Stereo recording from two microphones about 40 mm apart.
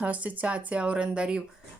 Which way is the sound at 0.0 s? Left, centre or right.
Right.